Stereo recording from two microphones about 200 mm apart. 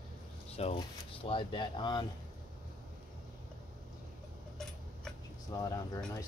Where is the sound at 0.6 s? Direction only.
30° left (ahead or behind).